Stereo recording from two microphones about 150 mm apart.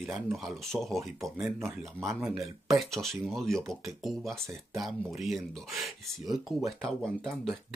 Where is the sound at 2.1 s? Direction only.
Centre (ahead or behind).